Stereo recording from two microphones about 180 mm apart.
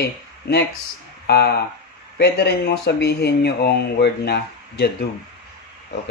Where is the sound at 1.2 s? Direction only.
60° left (ahead or behind).